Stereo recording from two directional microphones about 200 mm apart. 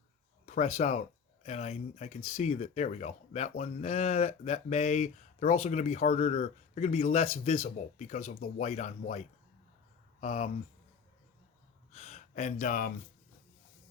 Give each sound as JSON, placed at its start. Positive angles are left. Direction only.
{"t": 0.4, "sound": "speech", "side_deg": 35}
{"t": 11.9, "sound": "gasp", "side_deg": 35}